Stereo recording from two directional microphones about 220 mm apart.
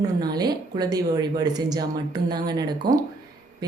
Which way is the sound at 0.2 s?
15° right (ahead or behind).